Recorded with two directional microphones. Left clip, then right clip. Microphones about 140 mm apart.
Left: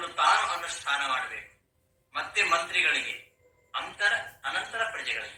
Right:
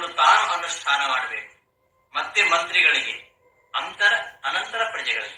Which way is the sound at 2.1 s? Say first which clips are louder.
Right 6 dB; 20° right (ahead or behind).